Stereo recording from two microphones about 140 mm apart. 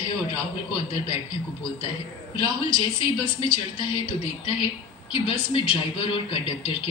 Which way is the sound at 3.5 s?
35° left (ahead or behind).